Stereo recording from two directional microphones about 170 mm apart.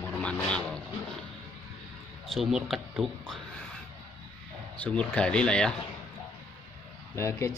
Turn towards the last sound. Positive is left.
turn(degrees=15)  # may be behind; listen again after turning